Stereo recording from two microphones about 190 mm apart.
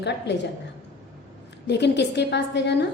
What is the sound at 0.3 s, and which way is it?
Speech, 65° left (ahead or behind).